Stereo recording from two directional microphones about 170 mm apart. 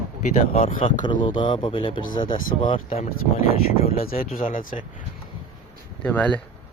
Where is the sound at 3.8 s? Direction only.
60° left (ahead or behind).